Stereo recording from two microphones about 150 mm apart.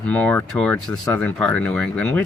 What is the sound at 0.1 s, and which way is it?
Speech, 10° left (ahead or behind).